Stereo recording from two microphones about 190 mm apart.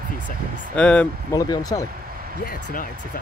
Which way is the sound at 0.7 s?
5° left (ahead or behind).